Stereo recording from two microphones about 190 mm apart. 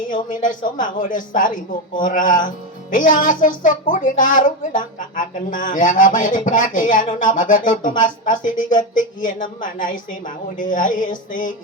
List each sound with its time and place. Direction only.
0.1 s a woman's voice: 45° left (ahead or behind)